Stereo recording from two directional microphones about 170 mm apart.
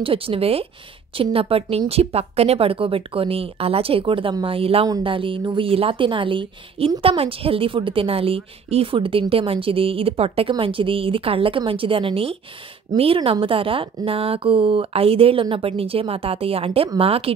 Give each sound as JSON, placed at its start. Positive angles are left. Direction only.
{"t": 0.0, "sound": "a woman's voice", "side_deg": -30}